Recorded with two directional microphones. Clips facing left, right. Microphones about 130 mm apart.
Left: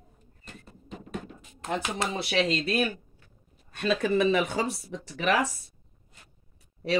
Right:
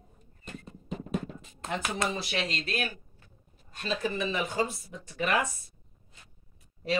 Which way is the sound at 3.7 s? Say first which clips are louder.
Left 7 dB; 65° left (ahead or behind).